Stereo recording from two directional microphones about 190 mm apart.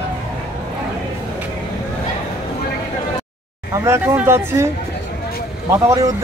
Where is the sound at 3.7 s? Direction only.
15° right (ahead or behind).